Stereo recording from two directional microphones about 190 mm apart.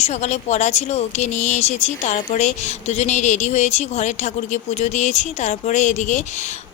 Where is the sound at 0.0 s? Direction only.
35° left (ahead or behind).